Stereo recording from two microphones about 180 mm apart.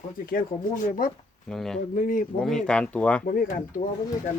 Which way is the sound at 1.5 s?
5° left (ahead or behind).